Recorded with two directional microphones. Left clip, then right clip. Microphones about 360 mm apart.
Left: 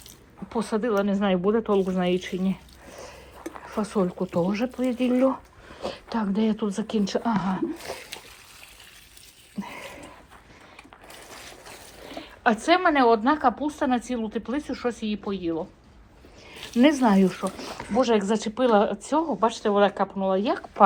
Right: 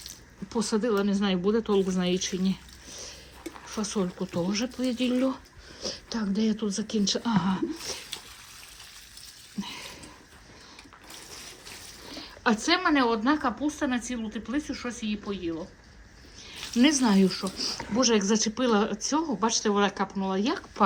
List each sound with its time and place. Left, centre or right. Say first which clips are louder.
0.4 s a woman's voice: left 1 dB; centre
3.8 s speech: left 4 dB; left
4.5 s a woman's voice: left 3 dB; centre
9.6 s a sound: left 1 dB; centre
12.2 s a woman's voice: left 3 dB; centre
16.8 s a woman's voice: left 4 dB; centre